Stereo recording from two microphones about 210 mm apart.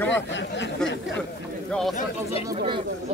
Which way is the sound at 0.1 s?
60° left (ahead or behind).